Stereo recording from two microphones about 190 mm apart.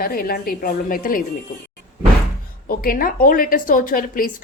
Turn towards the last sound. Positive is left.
turn(degrees=45)  # may be behind; listen again after turning